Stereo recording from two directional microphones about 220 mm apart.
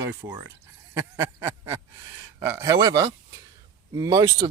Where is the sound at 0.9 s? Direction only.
10° right (ahead or behind).